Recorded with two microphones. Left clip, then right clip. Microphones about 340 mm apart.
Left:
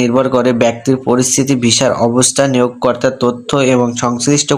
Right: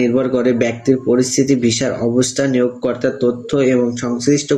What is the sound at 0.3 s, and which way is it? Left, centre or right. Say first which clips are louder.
Speech: left 4 dB; left.